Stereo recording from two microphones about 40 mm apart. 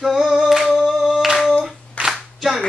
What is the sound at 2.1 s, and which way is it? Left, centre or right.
Clapping, centre.